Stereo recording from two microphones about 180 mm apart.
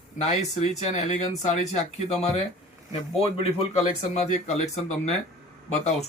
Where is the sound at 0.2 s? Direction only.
40° left (ahead or behind).